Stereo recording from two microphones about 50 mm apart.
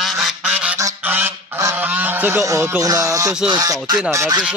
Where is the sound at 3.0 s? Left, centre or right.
Right.